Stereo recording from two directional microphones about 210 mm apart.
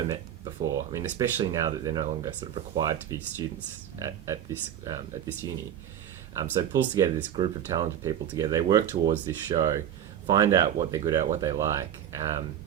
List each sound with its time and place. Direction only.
0.0 s speech: 20° right (ahead or behind)
6.6 s speech: 15° right (ahead or behind)